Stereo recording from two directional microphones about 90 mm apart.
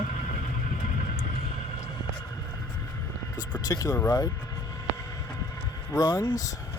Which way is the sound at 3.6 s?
45° left (ahead or behind).